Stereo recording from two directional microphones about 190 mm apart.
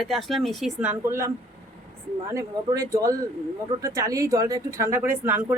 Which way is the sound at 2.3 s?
15° right (ahead or behind).